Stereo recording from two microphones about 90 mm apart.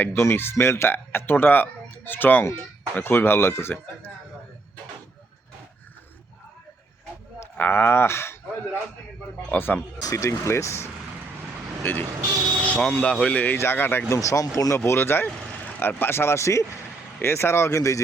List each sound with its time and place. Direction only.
0.0 s speech: 25° left (ahead or behind)
7.5 s speech: 20° left (ahead or behind)
10.0 s speech: 35° left (ahead or behind)
14.1 s speech: 35° left (ahead or behind)
14.8 s speech: 25° left (ahead or behind)